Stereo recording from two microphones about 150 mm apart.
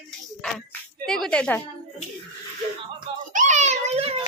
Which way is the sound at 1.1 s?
5° left (ahead or behind).